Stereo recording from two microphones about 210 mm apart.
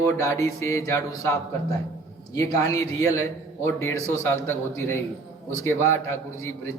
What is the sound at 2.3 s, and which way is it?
Speech, 15° left (ahead or behind).